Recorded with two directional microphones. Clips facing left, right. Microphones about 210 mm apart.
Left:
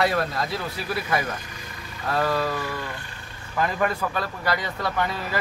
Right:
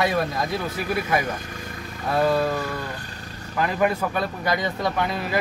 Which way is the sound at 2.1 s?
15° right (ahead or behind).